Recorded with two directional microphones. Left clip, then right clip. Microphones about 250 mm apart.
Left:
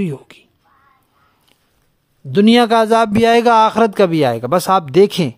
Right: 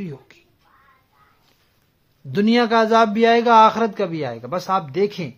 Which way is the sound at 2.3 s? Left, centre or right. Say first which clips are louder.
Left 6 dB; left.